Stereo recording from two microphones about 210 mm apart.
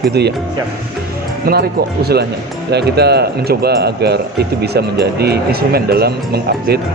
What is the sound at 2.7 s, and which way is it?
A man's voice, 50° right (ahead or behind).